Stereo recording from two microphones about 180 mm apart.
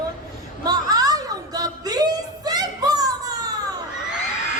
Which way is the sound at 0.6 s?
20° right (ahead or behind).